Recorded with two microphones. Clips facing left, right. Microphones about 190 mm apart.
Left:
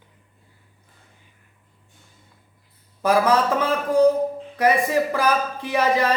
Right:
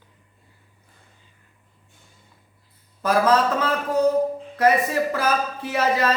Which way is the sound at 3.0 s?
15° left (ahead or behind).